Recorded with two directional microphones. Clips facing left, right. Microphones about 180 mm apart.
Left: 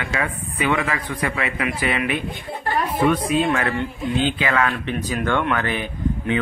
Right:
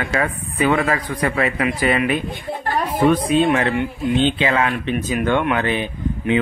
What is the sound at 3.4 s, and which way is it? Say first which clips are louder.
Speech: right 4 dB; 20° right (ahead or behind).